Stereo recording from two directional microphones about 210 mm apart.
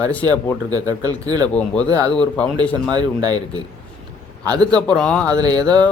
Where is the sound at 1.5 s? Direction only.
5° left (ahead or behind).